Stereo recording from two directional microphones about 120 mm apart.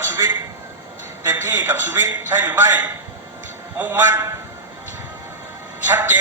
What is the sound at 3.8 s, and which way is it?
Speech, 15° right (ahead or behind).